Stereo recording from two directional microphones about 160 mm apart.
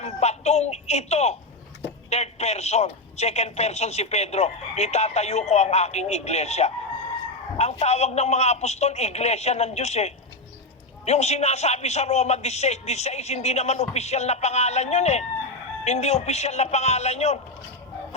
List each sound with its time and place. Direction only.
0.0 s a man's voice: 45° left (ahead or behind)